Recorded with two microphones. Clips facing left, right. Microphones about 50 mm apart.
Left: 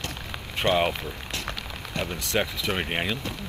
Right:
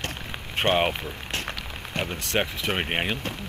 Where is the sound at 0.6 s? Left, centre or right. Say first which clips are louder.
Right 1 dB; right.